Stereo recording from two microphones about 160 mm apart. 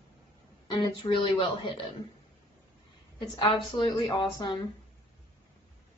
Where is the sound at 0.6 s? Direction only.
30° left (ahead or behind).